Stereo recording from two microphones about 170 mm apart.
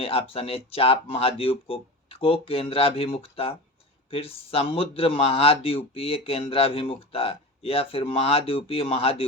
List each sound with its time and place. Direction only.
0.0 s speech: 35° left (ahead or behind)